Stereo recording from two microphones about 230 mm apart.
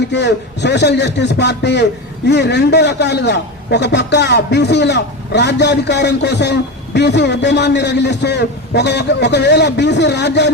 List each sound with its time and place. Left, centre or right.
0.1 s a man's voice: left